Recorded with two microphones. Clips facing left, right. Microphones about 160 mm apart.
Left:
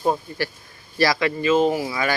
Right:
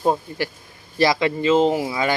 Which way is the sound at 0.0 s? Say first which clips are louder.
Right 2 dB; 20° right (ahead or behind).